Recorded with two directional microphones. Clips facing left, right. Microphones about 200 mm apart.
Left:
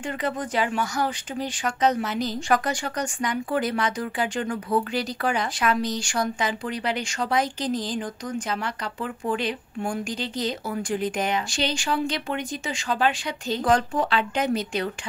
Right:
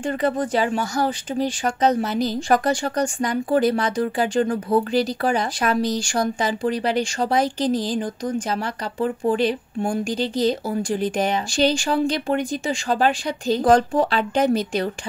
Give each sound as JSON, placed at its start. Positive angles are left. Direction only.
{"t": 0.0, "sound": "speech", "side_deg": -35}